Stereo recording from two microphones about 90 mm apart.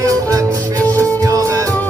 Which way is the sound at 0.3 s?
40° right (ahead or behind).